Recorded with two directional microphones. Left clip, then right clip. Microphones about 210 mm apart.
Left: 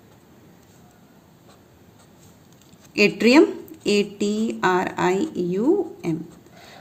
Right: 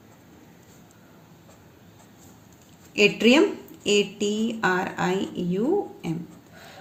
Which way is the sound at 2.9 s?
50° left (ahead or behind).